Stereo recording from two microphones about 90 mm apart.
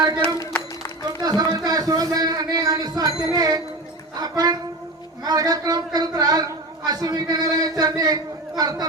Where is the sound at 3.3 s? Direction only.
45° right (ahead or behind).